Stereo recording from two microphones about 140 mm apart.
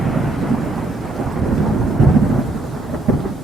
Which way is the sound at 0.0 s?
Centre (ahead or behind).